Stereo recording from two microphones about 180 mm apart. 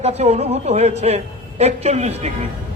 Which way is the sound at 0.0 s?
35° right (ahead or behind).